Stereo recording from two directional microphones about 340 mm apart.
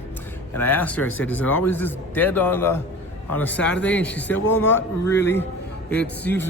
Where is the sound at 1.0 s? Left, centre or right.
Left.